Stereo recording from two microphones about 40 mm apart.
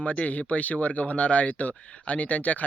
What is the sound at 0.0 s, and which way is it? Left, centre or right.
Speech, left.